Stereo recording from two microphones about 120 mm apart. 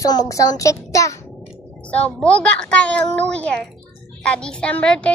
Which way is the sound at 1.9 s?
10° left (ahead or behind).